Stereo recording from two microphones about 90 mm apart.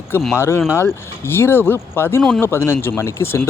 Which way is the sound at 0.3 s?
30° left (ahead or behind).